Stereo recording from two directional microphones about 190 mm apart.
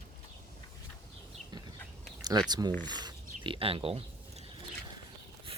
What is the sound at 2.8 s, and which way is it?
Speech, 20° right (ahead or behind).